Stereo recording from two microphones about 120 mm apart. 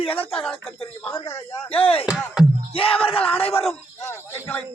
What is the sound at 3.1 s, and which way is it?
Speech, 50° left (ahead or behind).